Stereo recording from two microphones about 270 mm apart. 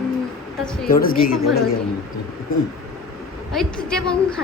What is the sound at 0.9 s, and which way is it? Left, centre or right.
Speech, left.